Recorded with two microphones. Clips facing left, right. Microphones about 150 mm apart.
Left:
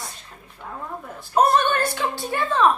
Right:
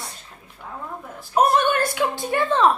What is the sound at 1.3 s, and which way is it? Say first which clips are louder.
Speech: even; 10° right (ahead or behind).